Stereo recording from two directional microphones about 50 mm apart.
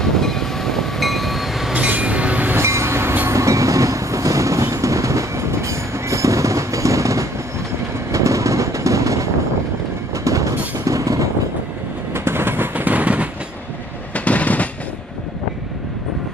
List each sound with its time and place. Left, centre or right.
0.0 s train: centre
1.7 s train: right
2.5 s train: right
3.3 s train: right
8.1 s vehicle: right
10.1 s train: right
12.1 s train: right
14.1 s a sound: left